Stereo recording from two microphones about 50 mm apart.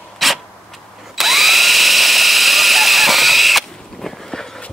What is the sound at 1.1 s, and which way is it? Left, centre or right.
Drill, centre.